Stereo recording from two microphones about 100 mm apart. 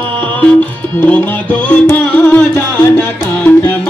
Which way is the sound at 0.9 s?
15° left (ahead or behind).